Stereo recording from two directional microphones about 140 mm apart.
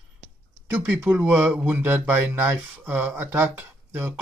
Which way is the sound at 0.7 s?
10° right (ahead or behind).